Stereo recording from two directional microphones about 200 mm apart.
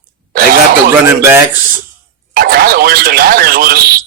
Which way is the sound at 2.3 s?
50° right (ahead or behind).